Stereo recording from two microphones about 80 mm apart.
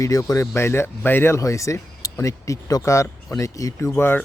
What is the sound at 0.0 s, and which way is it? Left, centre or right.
Speech, left.